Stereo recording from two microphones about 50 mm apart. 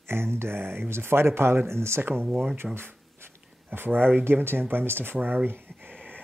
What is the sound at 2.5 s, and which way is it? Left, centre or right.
Speech, right.